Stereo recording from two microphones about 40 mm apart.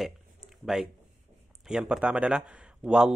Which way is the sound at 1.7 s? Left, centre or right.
Centre.